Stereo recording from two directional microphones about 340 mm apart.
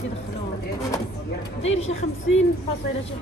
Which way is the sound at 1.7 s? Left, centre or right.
Left.